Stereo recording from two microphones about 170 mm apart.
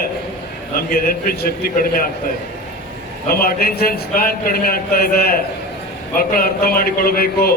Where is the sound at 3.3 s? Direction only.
60° left (ahead or behind).